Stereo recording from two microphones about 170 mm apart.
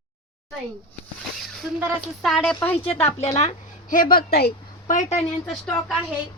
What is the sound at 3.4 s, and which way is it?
Speech, 45° left (ahead or behind).